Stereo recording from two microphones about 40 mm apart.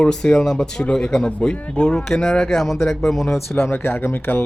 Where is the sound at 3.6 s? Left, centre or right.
Left.